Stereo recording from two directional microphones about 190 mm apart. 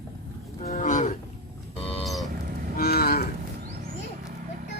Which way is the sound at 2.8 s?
55° left (ahead or behind).